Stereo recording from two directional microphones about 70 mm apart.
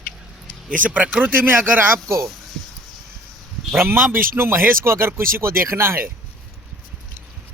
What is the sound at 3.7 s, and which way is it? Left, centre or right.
Speech, right.